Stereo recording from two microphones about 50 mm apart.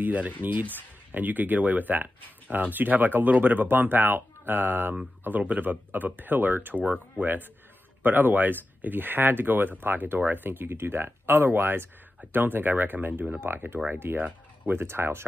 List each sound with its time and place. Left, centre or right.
0.0 s speech: right
6.8 s speech: right